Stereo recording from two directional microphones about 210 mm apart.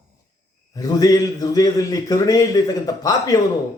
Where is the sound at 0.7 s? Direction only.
15° left (ahead or behind).